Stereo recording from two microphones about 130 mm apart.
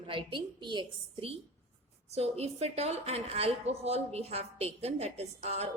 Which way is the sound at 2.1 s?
55° right (ahead or behind).